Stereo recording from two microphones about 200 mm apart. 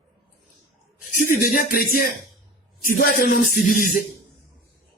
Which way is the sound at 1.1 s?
45° left (ahead or behind).